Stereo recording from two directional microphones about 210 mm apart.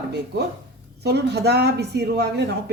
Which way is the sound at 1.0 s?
50° right (ahead or behind).